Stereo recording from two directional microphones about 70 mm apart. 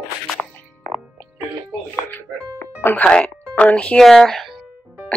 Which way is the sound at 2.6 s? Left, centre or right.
Left.